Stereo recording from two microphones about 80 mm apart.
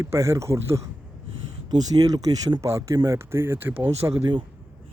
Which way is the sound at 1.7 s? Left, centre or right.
Right.